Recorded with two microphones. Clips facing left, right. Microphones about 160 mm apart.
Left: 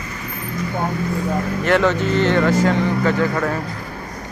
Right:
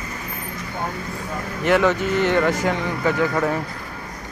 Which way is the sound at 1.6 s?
10° right (ahead or behind).